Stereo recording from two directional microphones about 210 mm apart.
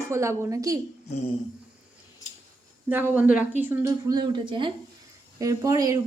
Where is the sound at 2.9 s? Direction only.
10° right (ahead or behind).